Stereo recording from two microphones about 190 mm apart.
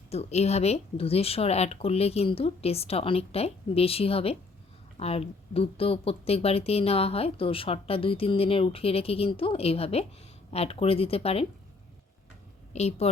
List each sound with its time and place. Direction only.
0.1 s speech: 35° left (ahead or behind)
12.7 s speech: 35° left (ahead or behind)